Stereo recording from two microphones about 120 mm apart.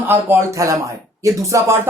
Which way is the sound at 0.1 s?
25° right (ahead or behind).